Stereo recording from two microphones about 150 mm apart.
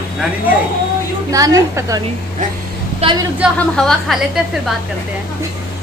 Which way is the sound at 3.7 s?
5° left (ahead or behind).